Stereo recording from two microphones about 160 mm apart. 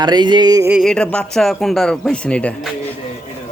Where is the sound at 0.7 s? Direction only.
Centre (ahead or behind).